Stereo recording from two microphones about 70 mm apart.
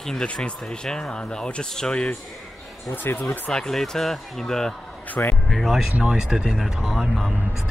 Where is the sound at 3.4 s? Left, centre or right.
Centre.